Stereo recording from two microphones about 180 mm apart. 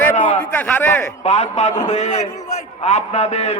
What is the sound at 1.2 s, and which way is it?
A man's voice, 40° left (ahead or behind).